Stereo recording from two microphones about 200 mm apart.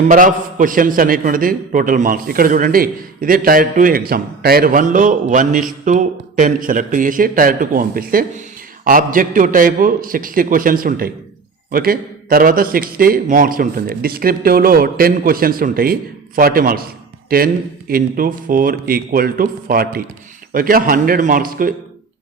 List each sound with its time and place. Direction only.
0.1 s a man's voice: 40° right (ahead or behind)